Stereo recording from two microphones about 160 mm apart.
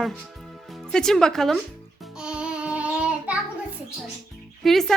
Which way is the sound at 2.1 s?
5° right (ahead or behind).